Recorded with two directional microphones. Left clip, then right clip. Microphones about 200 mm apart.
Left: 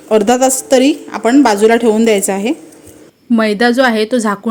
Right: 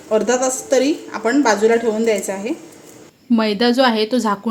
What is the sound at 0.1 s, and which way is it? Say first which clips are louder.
A woman's voice: left 6 dB; 45° left (ahead or behind).